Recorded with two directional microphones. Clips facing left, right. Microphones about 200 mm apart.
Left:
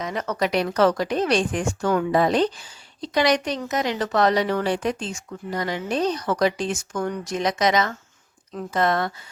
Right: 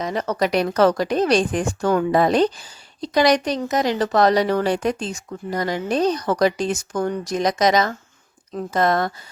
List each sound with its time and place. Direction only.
0.0 s a woman's voice: 35° right (ahead or behind)